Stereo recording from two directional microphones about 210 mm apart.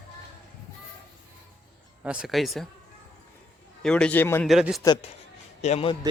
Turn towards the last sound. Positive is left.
turn(degrees=30)  # may be behind; listen again after turning